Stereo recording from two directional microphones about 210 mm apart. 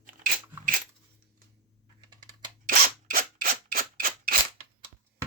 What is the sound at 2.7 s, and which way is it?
Scissors, 45° right (ahead or behind).